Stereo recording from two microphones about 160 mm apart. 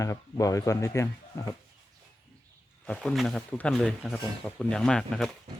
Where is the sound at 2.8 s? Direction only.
5° left (ahead or behind).